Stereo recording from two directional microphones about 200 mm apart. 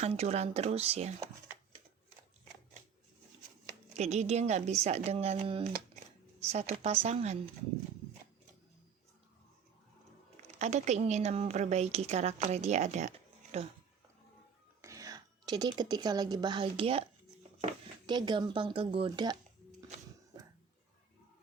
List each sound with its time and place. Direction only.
0.0 s a woman's voice: 35° right (ahead or behind)
3.9 s a woman's voice: 35° right (ahead or behind)
10.6 s a woman's voice: 35° right (ahead or behind)
14.8 s a woman's voice: 15° right (ahead or behind)